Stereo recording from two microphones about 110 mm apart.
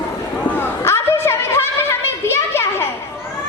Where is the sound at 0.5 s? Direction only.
20° left (ahead or behind).